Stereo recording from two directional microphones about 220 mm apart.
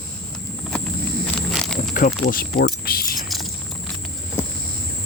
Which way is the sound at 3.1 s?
Centre (ahead or behind).